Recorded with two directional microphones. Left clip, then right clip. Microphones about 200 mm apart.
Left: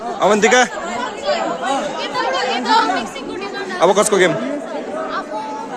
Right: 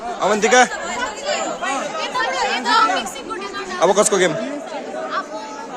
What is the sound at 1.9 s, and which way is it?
Chatter, 40° right (ahead or behind).